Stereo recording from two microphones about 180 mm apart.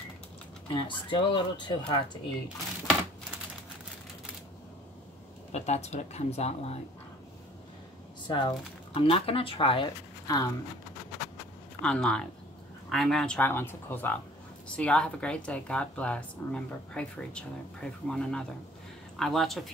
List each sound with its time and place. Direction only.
0.7 s speech: 30° left (ahead or behind)
5.5 s speech: 35° left (ahead or behind)
8.3 s speech: 25° left (ahead or behind)
11.8 s speech: 5° left (ahead or behind)